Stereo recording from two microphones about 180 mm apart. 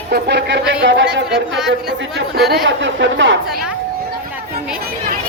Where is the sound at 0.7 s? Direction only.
85° right.